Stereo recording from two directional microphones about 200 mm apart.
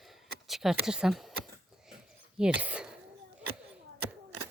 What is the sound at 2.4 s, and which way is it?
Speech, 5° right (ahead or behind).